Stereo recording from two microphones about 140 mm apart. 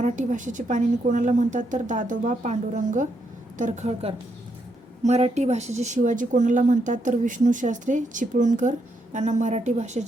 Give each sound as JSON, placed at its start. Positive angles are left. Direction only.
{"t": 0.0, "sound": "speech", "side_deg": -65}